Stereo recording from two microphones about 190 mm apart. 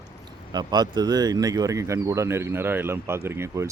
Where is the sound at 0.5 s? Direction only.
20° right (ahead or behind).